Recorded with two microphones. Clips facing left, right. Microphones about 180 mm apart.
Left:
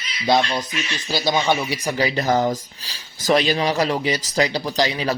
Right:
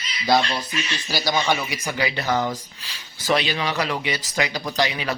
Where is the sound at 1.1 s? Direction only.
20° left (ahead or behind).